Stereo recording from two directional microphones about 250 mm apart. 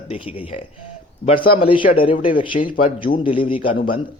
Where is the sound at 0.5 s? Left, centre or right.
Left.